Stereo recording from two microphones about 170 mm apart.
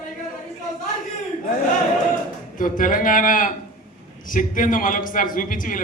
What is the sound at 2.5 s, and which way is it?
A man's voice, 50° left (ahead or behind).